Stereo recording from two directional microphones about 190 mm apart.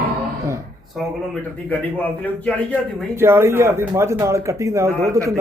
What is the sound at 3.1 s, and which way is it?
Speech, 15° right (ahead or behind).